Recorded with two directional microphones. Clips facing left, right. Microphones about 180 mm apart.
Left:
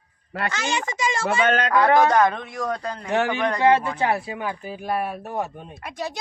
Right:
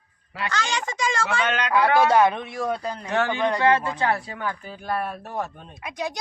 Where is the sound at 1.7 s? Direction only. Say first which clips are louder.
Even; 10° right (ahead or behind).